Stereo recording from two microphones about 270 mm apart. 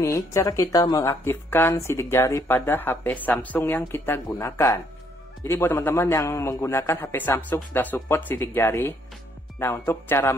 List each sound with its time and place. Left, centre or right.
0.0 s speech: centre